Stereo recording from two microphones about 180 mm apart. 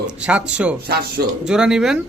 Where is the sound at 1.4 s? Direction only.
5° right (ahead or behind).